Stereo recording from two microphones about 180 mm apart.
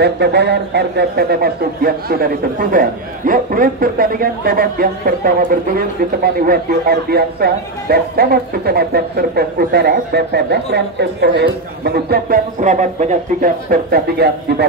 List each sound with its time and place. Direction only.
0.0 s a man's voice: 65° right (ahead or behind)